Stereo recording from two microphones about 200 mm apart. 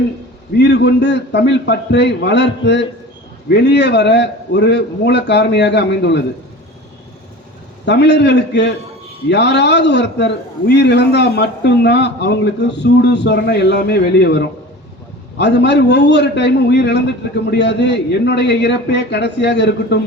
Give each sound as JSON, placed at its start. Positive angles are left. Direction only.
{"t": 0.5, "sound": "a man's voice", "side_deg": 60}
{"t": 7.9, "sound": "a man's voice", "side_deg": 60}